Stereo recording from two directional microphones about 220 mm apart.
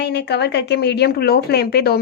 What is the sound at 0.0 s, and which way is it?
Speech, 50° left (ahead or behind).